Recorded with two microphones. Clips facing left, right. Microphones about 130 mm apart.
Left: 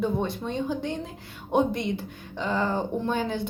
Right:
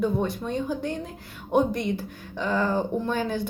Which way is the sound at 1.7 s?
55° right (ahead or behind).